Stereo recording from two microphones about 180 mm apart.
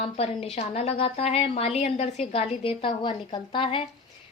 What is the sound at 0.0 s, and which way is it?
A woman's voice, 35° left (ahead or behind).